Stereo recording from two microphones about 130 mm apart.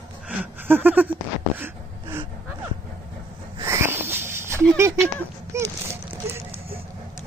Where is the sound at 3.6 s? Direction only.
20° right (ahead or behind).